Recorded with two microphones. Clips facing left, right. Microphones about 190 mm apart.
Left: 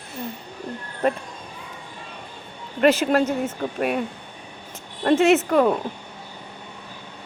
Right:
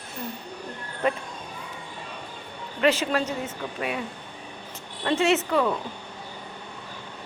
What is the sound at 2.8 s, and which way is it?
Speech, 50° left (ahead or behind).